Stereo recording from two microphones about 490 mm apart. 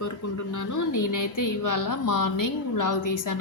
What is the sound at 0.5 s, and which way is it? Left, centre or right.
A woman's voice, left.